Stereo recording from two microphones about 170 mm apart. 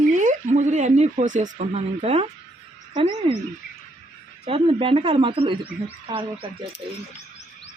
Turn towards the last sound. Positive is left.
turn(degrees=-30)  # may be behind; listen again after turning